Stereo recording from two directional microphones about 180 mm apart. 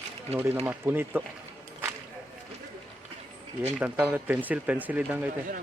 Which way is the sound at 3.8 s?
10° right (ahead or behind).